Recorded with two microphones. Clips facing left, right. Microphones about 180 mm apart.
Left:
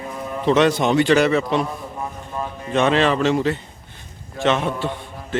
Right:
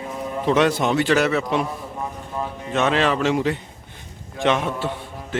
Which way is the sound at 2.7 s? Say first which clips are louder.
Left 3 dB; 5° right (ahead or behind).